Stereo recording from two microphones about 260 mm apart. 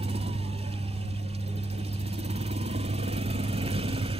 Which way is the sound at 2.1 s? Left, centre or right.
Right.